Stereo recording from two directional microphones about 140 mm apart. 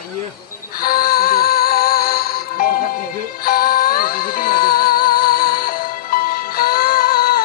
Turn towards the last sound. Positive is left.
turn(degrees=90)